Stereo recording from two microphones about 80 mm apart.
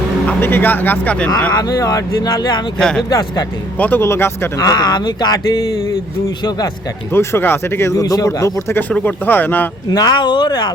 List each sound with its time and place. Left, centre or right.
0.3 s speech: left
1.5 s speech: left
2.7 s speech: centre
3.1 s speech: left
3.8 s speech: left
4.0 s speech: left
4.5 s speech: left
7.1 s speech: left
8.9 s speech: left
9.9 s speech: left